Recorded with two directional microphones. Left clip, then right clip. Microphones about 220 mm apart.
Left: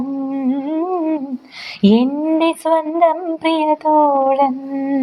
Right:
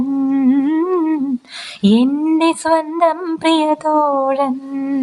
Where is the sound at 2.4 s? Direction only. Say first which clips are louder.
Even; 15° right (ahead or behind).